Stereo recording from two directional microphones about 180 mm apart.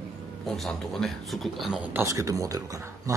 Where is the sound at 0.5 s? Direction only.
Centre (ahead or behind).